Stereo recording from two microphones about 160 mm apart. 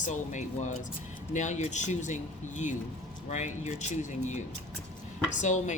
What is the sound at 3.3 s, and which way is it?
Speech, 50° left (ahead or behind).